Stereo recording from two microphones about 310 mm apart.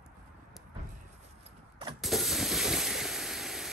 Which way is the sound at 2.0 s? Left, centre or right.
Centre.